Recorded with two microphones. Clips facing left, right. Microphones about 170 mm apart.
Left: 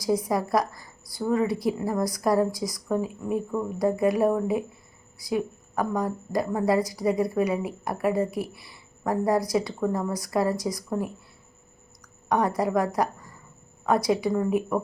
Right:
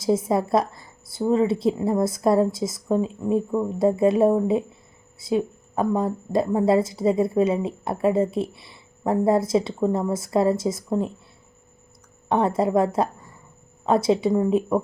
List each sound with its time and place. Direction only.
0.0 s a woman's voice: 25° right (ahead or behind)
12.3 s a woman's voice: 25° right (ahead or behind)